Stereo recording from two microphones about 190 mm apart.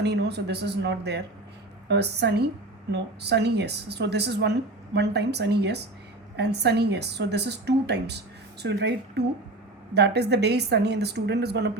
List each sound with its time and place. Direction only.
0.0 s a woman's voice: 60° right (ahead or behind)